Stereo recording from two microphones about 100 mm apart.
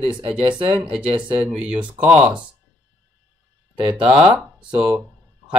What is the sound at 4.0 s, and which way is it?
Speech, 60° right (ahead or behind).